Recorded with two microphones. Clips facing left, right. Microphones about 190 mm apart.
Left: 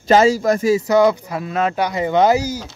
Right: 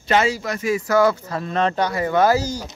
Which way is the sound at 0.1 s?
40° left (ahead or behind).